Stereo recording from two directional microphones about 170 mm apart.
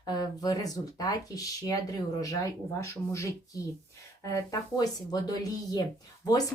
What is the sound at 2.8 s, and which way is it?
A woman's voice, 15° left (ahead or behind).